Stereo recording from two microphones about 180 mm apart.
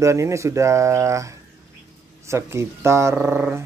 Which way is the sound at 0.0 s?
15° right (ahead or behind).